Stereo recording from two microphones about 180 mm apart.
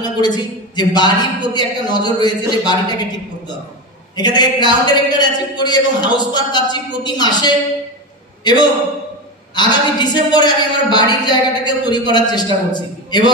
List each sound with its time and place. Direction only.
0.0 s speech: 25° left (ahead or behind)